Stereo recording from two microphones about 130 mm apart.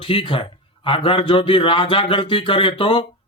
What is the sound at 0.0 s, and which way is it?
Speech, 40° left (ahead or behind).